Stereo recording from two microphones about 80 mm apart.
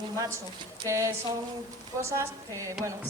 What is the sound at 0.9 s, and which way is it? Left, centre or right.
A woman's voice, right.